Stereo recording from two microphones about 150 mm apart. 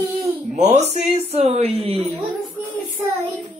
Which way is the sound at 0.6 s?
50° right (ahead or behind).